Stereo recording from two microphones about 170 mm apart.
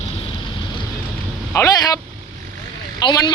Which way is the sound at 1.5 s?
20° left (ahead or behind).